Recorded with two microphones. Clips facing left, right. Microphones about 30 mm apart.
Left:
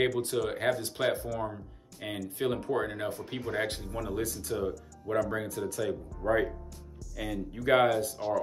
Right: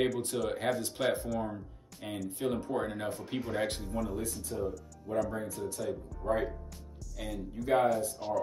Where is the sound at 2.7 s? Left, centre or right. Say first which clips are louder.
Left 2 dB; centre.